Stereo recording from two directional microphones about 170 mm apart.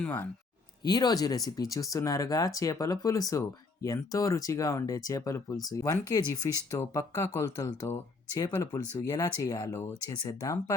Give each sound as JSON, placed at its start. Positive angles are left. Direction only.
{"t": 0.0, "sound": "speech", "side_deg": 10}
{"t": 0.9, "sound": "speech", "side_deg": 25}